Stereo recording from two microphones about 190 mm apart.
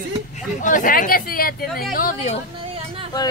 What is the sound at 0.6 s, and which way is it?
Speech, 45° left (ahead or behind).